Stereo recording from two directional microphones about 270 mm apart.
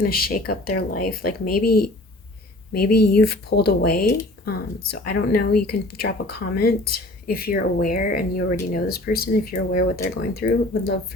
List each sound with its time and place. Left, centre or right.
0.0 s speech: left